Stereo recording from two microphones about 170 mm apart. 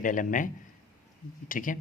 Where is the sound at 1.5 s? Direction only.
50° left (ahead or behind).